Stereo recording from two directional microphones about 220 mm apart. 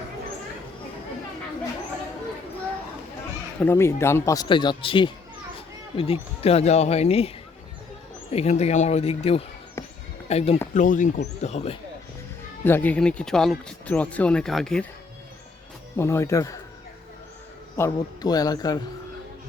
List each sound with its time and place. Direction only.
3.6 s speech: 10° left (ahead or behind); by 7.3 s 30° left (ahead or behind)
8.3 s speech: 30° left (ahead or behind)
9.8 s basketball bounce: 10° left (ahead or behind)
10.2 s speech: 30° left (ahead or behind)
12.6 s speech: 10° left (ahead or behind)
16.0 s speech: 10° left (ahead or behind)
17.7 s speech: 15° left (ahead or behind)